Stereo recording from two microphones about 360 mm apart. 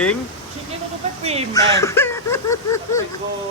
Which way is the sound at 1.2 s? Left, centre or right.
Centre.